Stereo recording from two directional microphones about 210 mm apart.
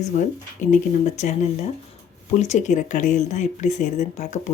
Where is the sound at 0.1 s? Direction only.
35° left (ahead or behind).